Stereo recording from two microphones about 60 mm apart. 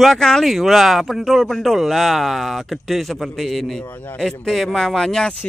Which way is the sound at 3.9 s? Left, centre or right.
Left.